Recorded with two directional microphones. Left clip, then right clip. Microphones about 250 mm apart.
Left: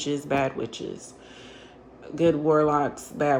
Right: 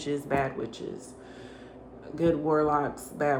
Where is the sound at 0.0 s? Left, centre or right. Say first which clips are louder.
Left 3 dB; left.